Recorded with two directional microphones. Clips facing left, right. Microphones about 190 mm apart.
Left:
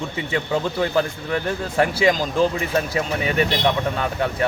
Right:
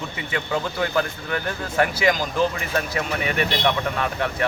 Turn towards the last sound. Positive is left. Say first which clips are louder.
# left 2 dB
turn(degrees=30)  # may be behind; listen again after turning